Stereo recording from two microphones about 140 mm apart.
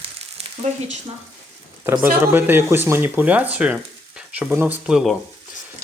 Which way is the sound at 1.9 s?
15° right (ahead or behind).